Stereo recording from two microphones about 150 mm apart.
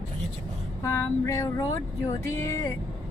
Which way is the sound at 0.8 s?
20° left (ahead or behind).